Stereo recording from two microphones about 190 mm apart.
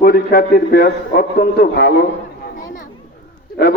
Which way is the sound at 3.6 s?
55° left (ahead or behind).